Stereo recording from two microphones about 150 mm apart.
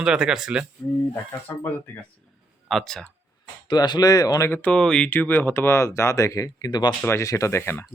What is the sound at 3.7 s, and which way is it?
Speech, 25° left (ahead or behind).